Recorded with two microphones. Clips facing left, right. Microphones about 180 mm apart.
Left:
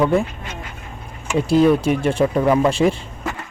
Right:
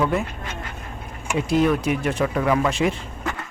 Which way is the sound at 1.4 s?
30° left (ahead or behind).